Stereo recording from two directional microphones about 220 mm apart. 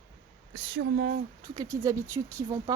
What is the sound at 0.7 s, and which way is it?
Speech, 40° right (ahead or behind).